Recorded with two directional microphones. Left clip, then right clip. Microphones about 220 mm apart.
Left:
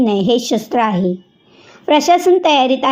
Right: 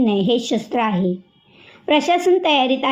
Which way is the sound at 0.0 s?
25° left (ahead or behind).